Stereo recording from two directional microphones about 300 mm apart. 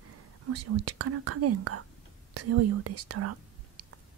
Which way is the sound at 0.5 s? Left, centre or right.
Right.